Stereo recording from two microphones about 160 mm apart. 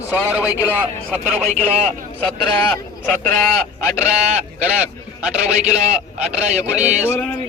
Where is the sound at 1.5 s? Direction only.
45° right (ahead or behind).